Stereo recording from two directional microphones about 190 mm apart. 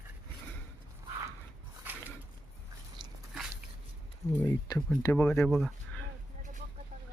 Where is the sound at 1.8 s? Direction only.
10° right (ahead or behind).